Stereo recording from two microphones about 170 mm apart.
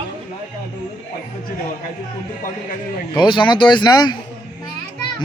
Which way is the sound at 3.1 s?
30° left (ahead or behind).